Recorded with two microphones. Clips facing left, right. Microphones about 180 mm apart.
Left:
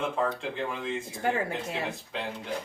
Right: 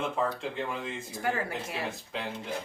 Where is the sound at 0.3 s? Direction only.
Centre (ahead or behind).